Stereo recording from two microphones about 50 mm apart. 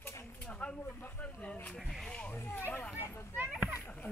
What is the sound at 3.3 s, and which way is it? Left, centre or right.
Speech, right.